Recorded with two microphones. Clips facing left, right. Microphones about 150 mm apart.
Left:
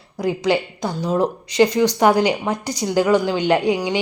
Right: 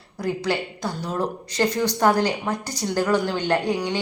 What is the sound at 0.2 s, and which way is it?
Speech, 15° left (ahead or behind).